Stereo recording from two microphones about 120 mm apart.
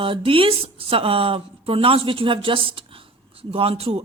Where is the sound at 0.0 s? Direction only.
45° right (ahead or behind).